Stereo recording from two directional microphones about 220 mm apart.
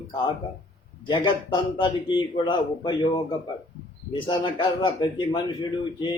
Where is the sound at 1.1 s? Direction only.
20° left (ahead or behind).